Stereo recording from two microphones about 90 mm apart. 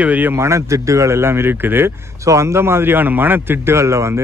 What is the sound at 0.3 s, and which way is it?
A man's voice, 30° right (ahead or behind).